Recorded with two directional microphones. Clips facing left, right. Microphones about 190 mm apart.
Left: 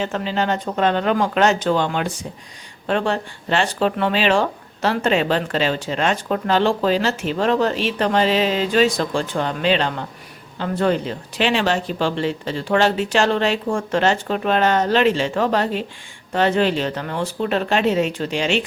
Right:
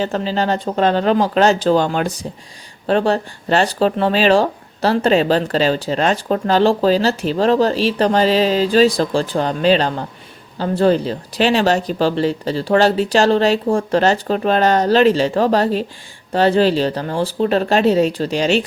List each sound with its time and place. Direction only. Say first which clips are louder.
0.0 s speech: right 3 dB; 35° right (ahead or behind)